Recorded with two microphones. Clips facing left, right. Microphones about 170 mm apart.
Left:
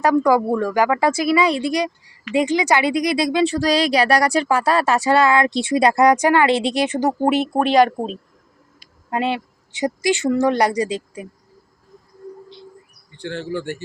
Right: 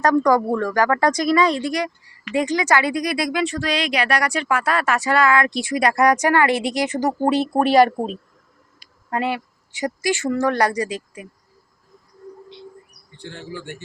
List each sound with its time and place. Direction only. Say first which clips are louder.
0.0 s speech: left 1 dB; 10° left (ahead or behind)
9.0 s speech: left 2 dB; 20° left (ahead or behind)
13.2 s speech: left 8 dB; 75° left (ahead or behind); by 13.7 s 60° left (ahead or behind)